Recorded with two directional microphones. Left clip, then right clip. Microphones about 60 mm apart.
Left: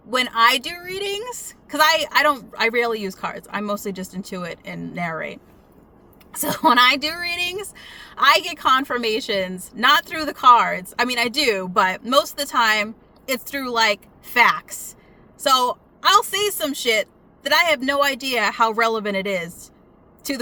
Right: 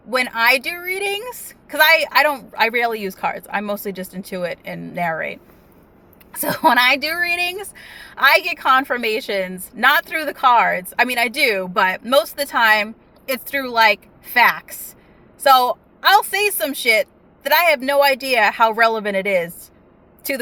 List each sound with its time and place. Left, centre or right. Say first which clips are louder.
0.3 s speech: even; left
2.5 s speech: right 2 dB; left
6.4 s speech: right 1 dB; left